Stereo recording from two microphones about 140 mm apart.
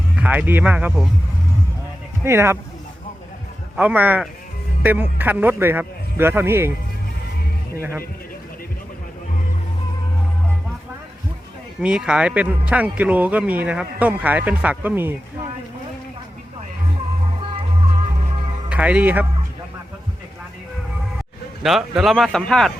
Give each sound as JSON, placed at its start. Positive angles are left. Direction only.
{"t": 0.2, "sound": "speech", "side_deg": -10}
{"t": 2.2, "sound": "speech", "side_deg": -15}
{"t": 3.8, "sound": "speech", "side_deg": -10}
{"t": 7.8, "sound": "speech", "side_deg": -20}
{"t": 11.8, "sound": "speech", "side_deg": -5}
{"t": 18.7, "sound": "speech", "side_deg": -10}
{"t": 21.6, "sound": "speech", "side_deg": 0}